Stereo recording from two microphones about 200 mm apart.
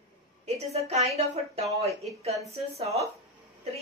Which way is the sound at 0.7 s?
30° right (ahead or behind).